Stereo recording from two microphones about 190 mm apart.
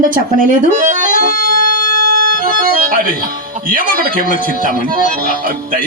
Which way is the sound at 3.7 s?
50° right (ahead or behind).